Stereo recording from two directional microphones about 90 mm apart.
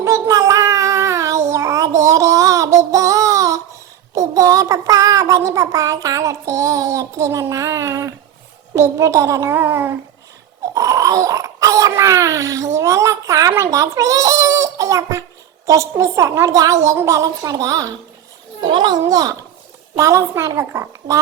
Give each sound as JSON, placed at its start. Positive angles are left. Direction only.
{"t": 0.0, "sound": "child singing", "side_deg": -35}
{"t": 8.7, "sound": "a woman's voice", "side_deg": -30}
{"t": 10.8, "sound": "a child's voice", "side_deg": -35}
{"t": 18.6, "sound": "a child's voice", "side_deg": -55}
{"t": 20.0, "sound": "a woman's voice", "side_deg": -35}